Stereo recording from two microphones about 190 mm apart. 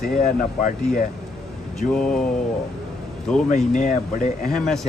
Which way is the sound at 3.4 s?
40° left (ahead or behind).